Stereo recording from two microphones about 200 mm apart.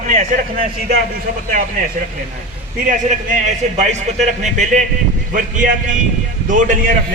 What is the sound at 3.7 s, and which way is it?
A man's voice, 35° right (ahead or behind).